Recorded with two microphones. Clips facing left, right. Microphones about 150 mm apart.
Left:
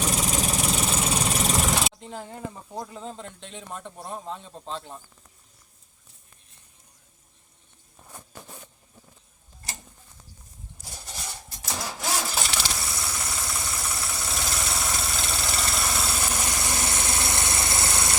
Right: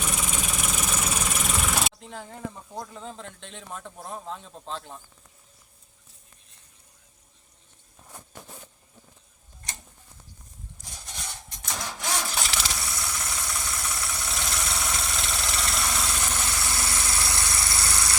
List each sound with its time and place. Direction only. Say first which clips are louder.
0.0 s vehicle: left 5 dB; 35° left (ahead or behind)
1.8 s speech: left 2 dB; centre (ahead or behind)
11.4 s engine starting: left 2 dB; 5° left (ahead or behind)
16.6 s vehicle: left 2 dB; 20° left (ahead or behind)